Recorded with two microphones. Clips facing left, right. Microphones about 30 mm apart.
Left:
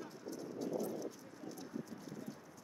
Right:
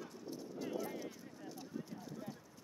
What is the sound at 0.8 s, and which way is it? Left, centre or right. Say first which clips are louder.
Clip-clop: left 2 dB; right.